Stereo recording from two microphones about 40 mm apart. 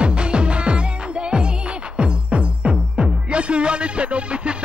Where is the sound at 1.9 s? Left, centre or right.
Right.